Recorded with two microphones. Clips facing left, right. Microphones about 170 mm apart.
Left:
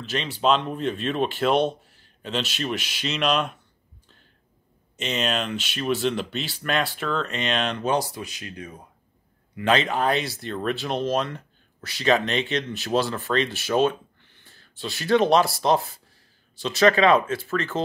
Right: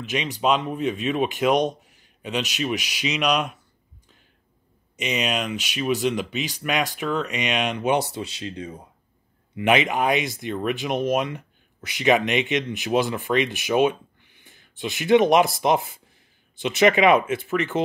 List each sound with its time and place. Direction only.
0.0 s speech: 15° right (ahead or behind)
4.9 s speech: 10° right (ahead or behind)
7.9 s speech: 25° right (ahead or behind)